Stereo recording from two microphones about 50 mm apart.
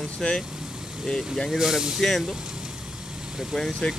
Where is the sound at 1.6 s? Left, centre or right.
Centre.